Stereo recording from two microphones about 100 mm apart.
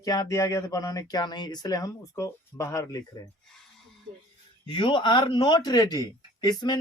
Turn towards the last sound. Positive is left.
turn(degrees=45)  # may be behind; listen again after turning